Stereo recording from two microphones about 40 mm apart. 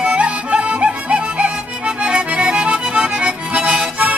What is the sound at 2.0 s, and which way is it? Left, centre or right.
Accordion, right.